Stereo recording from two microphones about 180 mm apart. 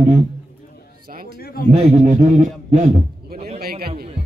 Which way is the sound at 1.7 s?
40° right (ahead or behind).